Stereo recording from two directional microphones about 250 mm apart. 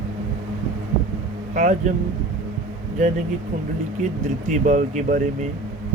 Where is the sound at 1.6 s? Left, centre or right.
Right.